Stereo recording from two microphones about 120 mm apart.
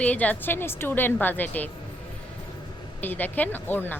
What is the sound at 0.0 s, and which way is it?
A woman's voice, 10° left (ahead or behind).